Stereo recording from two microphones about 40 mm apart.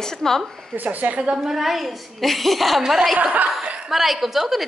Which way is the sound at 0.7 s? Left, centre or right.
Right.